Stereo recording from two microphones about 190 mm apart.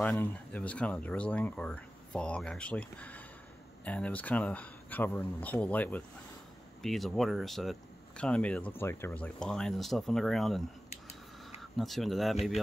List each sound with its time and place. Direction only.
0.0 s speech: 10° left (ahead or behind)
10.9 s a sound: 35° left (ahead or behind)
11.8 s speech: centre (ahead or behind)